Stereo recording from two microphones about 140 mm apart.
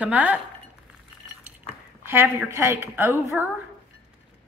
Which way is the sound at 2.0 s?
15° right (ahead or behind).